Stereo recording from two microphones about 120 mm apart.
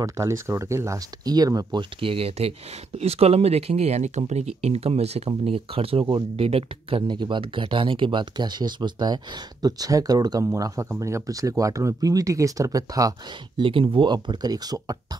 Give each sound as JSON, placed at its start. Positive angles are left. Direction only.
{"t": 0.0, "sound": "speech", "side_deg": -25}
{"t": 13.6, "sound": "speech", "side_deg": -45}